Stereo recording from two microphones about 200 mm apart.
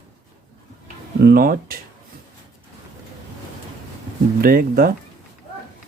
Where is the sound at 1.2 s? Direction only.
45° right (ahead or behind).